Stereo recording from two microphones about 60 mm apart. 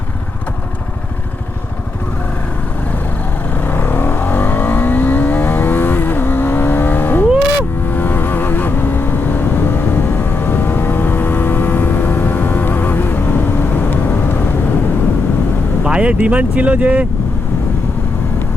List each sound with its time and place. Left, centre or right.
3.6 s vehicle: left
15.8 s speech: centre